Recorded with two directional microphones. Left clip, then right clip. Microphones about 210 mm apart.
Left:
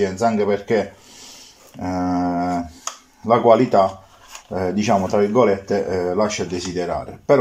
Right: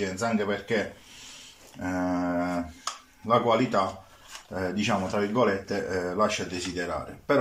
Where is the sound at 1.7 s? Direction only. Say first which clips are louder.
Left 7 dB; 30° left (ahead or behind).